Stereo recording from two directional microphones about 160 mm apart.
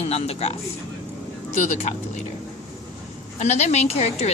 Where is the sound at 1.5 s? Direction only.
50° left (ahead or behind).